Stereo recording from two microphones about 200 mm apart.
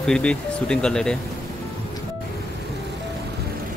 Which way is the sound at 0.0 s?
5° left (ahead or behind).